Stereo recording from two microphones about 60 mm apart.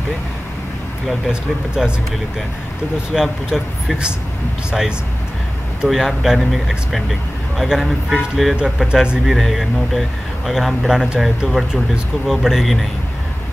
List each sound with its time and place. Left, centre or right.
3.2 s speech: centre
9.0 s speech: centre
9.3 s speech: centre